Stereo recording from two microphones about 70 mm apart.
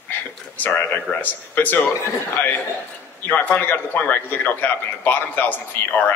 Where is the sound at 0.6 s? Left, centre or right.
Left.